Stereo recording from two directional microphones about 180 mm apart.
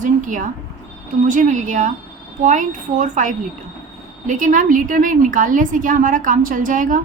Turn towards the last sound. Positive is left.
turn(degrees=-45)  # may be behind; listen again after turning